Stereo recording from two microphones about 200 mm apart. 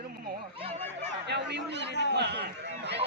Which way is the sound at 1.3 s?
60° right (ahead or behind).